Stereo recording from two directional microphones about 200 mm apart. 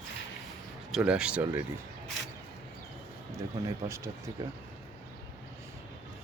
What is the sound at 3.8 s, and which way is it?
Speech, 15° right (ahead or behind).